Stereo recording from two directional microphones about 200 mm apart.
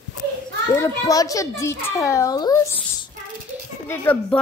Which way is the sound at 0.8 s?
15° left (ahead or behind).